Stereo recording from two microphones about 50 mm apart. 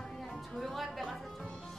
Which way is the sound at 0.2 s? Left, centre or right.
Centre.